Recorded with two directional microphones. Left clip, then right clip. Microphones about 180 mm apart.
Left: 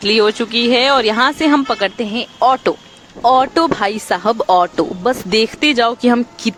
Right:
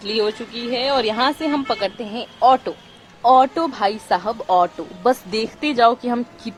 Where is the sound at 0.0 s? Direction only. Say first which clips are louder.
Left 8 dB; 40° left (ahead or behind).